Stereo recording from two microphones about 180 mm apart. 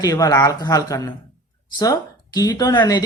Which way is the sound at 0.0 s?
20° left (ahead or behind).